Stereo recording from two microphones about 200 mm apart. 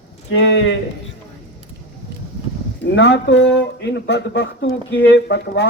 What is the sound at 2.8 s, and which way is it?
Speech, 60° left (ahead or behind).